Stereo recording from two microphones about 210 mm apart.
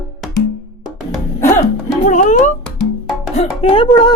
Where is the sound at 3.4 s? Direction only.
25° left (ahead or behind).